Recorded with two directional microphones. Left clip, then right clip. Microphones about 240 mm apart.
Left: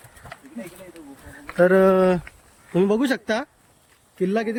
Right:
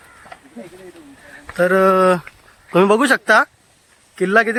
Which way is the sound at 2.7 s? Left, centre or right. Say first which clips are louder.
Right 7 dB; right.